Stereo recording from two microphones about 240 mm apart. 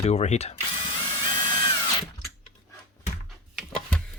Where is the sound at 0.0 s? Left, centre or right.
Left.